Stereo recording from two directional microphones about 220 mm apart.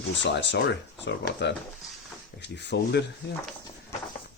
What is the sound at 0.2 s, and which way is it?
Speech, 55° left (ahead or behind).